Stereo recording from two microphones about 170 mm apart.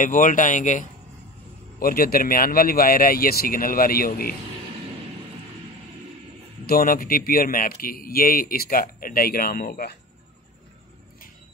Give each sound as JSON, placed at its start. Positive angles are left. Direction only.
{"t": 0.0, "sound": "speech", "side_deg": 50}
{"t": 1.8, "sound": "speech", "side_deg": 60}
{"t": 6.6, "sound": "speech", "side_deg": 60}